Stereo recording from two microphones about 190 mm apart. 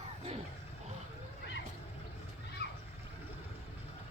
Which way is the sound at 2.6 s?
60° left (ahead or behind).